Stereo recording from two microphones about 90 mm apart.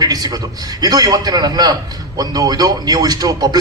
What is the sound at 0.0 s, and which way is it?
A man's voice, 45° right (ahead or behind).